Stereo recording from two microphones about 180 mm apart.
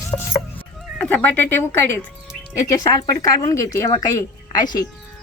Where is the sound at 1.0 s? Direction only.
10° left (ahead or behind).